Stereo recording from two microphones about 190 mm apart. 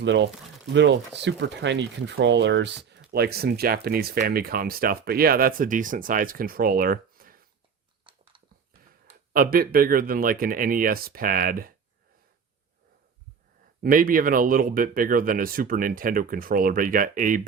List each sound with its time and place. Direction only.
0.0 s speech: 70° right (ahead or behind)
3.1 s speech: 55° right (ahead or behind)
8.1 s a sound: 25° right (ahead or behind)
9.0 s speech: 50° right (ahead or behind)
13.8 s speech: 50° right (ahead or behind)